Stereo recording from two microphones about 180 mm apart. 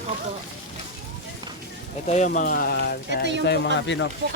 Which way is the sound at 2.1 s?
40° left (ahead or behind).